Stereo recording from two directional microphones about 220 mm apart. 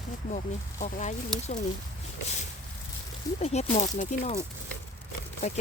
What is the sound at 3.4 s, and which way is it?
Speech, 30° left (ahead or behind).